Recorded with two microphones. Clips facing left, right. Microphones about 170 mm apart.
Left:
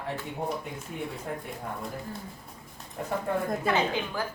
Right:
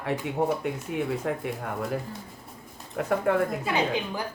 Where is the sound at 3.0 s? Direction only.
80° right.